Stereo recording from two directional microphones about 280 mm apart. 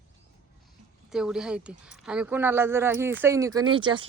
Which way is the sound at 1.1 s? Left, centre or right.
Centre.